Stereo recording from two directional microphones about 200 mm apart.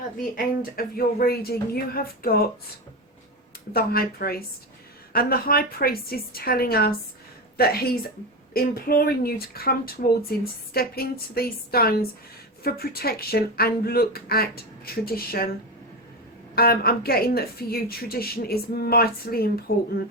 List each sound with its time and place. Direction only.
0.3 s a woman's voice: 45° left (ahead or behind)
3.7 s a woman's voice: 50° left (ahead or behind)
16.6 s a woman's voice: 50° left (ahead or behind)